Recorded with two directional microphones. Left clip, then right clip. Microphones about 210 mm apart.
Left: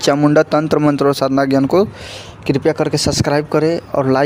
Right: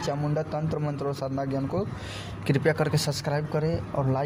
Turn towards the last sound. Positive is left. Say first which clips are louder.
# left 13 dB
turn(degrees=55)  # may be behind; listen again after turning